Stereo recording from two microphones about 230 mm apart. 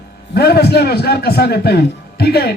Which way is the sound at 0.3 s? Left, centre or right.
Left.